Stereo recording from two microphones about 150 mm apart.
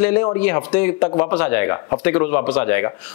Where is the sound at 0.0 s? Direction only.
10° left (ahead or behind).